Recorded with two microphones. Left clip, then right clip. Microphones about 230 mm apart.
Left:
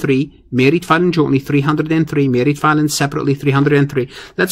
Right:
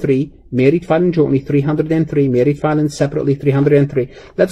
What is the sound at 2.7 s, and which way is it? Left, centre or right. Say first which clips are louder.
Speech: left 1 dB; left.